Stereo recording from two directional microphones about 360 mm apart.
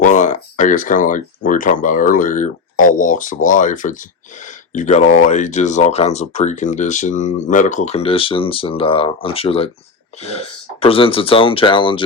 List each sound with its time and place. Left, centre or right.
0.0 s speech: left